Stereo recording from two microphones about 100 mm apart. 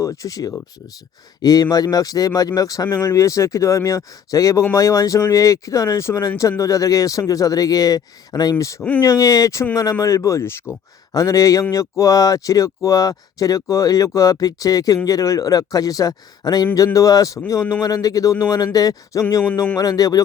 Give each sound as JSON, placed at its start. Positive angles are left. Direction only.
{"t": 0.0, "sound": "speech", "side_deg": 30}